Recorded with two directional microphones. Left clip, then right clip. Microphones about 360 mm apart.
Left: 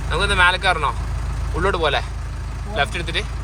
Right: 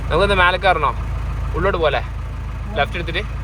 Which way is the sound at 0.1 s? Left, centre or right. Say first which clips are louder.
Right 2 dB; centre.